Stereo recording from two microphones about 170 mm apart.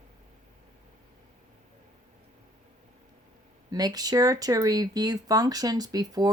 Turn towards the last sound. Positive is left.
turn(degrees=-25)  # may be behind; listen again after turning